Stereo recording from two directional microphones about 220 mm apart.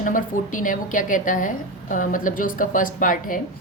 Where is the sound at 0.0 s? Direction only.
35° left (ahead or behind).